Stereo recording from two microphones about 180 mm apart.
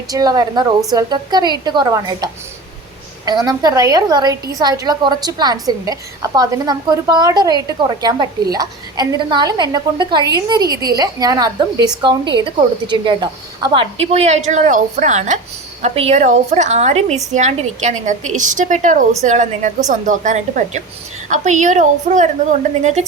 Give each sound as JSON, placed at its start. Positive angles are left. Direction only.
{"t": 0.1, "sound": "a woman's voice", "side_deg": -20}
{"t": 14.0, "sound": "a woman's voice", "side_deg": -35}